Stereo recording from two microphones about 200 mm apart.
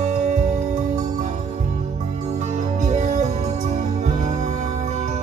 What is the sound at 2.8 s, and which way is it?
Music, 40° right (ahead or behind).